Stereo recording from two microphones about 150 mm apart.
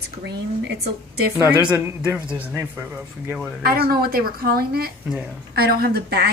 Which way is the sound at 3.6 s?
90° right.